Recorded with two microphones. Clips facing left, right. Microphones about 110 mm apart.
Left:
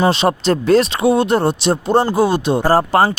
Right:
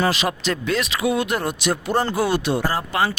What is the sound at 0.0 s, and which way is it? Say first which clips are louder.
Speech: left 7 dB; 30° left (ahead or behind).